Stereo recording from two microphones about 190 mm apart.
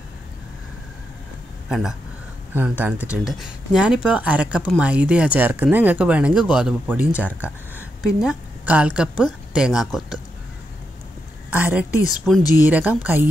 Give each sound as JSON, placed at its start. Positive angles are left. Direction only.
{"t": 1.7, "sound": "a woman's voice", "side_deg": 0}
{"t": 11.5, "sound": "speech", "side_deg": -10}